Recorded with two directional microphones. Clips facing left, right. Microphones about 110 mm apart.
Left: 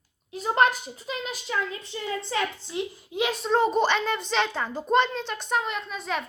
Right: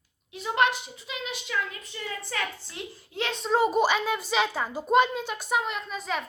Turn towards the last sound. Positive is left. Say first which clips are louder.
# left 1 dB
turn(degrees=0)  # may be behind; listen again after turning